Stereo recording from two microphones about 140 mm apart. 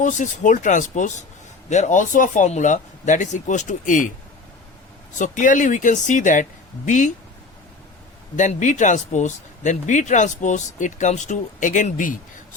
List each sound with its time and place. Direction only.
0.0 s speech: 65° left (ahead or behind)
5.1 s speech: 65° left (ahead or behind)
8.4 s speech: 60° left (ahead or behind)